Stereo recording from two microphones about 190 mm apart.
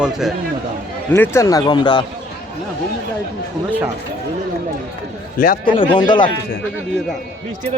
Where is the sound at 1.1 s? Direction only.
15° left (ahead or behind).